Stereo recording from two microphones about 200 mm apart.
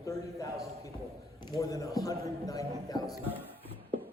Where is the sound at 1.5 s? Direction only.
15° left (ahead or behind).